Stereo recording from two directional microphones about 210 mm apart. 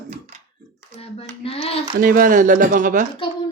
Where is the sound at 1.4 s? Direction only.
30° left (ahead or behind).